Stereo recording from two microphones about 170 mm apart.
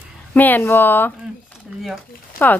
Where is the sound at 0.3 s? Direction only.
10° left (ahead or behind).